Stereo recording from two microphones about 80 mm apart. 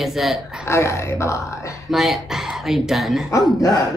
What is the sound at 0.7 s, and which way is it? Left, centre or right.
Speech, left.